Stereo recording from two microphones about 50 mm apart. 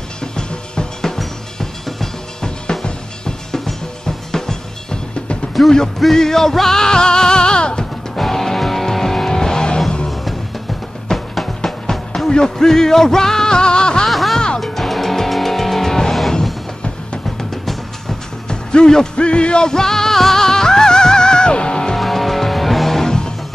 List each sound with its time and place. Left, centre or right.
0.2 s music: centre
5.6 s music: centre
8.2 s music: centre
14.0 s music: centre
18.5 s music: centre
21.9 s music: centre